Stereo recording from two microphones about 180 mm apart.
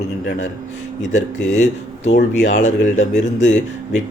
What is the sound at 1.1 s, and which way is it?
Speech, 40° left (ahead or behind).